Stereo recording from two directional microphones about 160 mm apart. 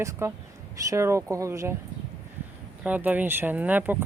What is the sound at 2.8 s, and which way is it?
Speech, 10° right (ahead or behind).